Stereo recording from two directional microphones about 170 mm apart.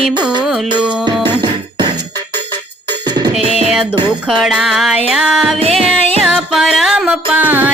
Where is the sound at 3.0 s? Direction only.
25° right (ahead or behind).